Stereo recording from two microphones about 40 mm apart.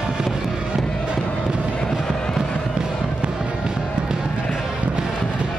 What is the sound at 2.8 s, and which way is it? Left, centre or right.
Music, right.